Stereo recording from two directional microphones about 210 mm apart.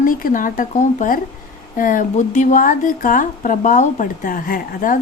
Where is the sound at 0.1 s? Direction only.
40° left (ahead or behind).